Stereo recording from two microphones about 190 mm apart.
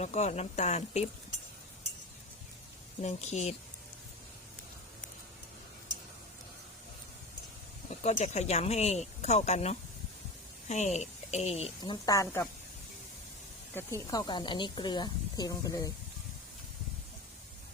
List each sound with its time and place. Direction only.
0.0 s speech: 35° left (ahead or behind)
3.0 s speech: 35° left (ahead or behind)
8.0 s speech: 35° left (ahead or behind)
11.8 s speech: 20° left (ahead or behind)
13.7 s speech: 15° left (ahead or behind)